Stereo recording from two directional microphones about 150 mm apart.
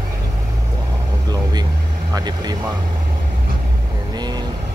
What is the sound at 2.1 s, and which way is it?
Speech, 25° right (ahead or behind).